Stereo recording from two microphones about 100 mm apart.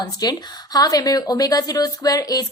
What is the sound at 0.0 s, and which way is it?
A woman's voice, 40° left (ahead or behind).